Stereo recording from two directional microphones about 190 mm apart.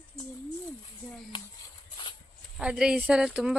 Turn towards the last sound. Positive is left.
turn(degrees=-5)  # may be behind; listen again after turning